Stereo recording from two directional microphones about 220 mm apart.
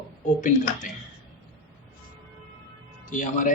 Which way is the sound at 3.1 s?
35° left (ahead or behind).